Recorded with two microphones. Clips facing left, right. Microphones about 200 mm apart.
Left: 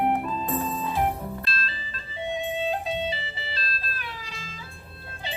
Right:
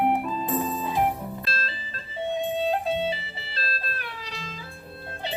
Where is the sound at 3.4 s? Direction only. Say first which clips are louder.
Right 1 dB; 60° right (ahead or behind).